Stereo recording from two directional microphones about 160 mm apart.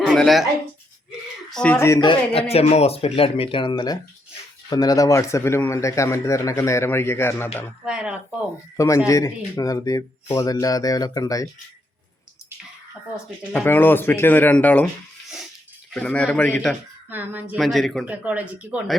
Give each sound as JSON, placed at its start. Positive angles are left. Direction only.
{"t": 0.1, "sound": "speech", "side_deg": 0}
{"t": 1.5, "sound": "speech", "side_deg": 5}
{"t": 2.0, "sound": "speech", "side_deg": 30}
{"t": 2.5, "sound": "a man's voice", "side_deg": 40}
{"t": 7.9, "sound": "speech", "side_deg": -5}
{"t": 8.7, "sound": "speech", "side_deg": 20}
{"t": 13.5, "sound": "a man's voice", "side_deg": 10}
{"t": 15.9, "sound": "a man's voice", "side_deg": 5}
{"t": 17.1, "sound": "a woman's voice", "side_deg": -10}
{"t": 18.1, "sound": "a woman's voice", "side_deg": -10}